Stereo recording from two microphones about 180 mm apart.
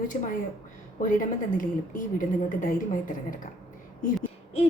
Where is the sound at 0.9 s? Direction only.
45° left (ahead or behind).